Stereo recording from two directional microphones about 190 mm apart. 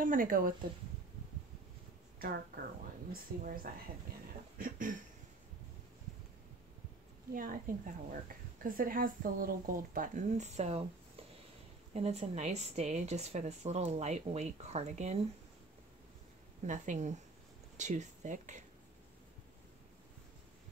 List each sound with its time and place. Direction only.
0.0 s a woman's voice: 45° right (ahead or behind)
2.1 s speech: 55° right (ahead or behind)
4.6 s a sound: 45° right (ahead or behind)
7.3 s a woman's voice: 45° right (ahead or behind)
16.6 s speech: 40° right (ahead or behind)